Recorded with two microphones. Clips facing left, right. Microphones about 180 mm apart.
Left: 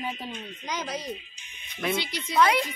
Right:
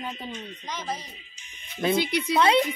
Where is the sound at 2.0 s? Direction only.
65° right (ahead or behind).